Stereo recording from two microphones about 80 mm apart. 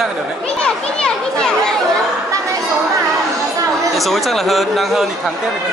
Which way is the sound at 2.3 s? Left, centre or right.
Right.